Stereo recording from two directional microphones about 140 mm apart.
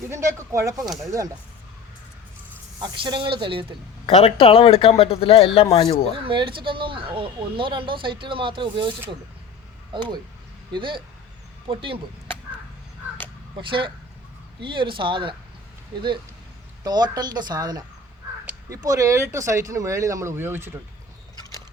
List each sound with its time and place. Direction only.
0.1 s speech: 20° right (ahead or behind)
2.7 s speech: 35° right (ahead or behind)
4.0 s a man's voice: 40° left (ahead or behind)
6.1 s speech: 40° right (ahead or behind)
13.6 s speech: 35° right (ahead or behind)
16.8 s speech: 30° right (ahead or behind)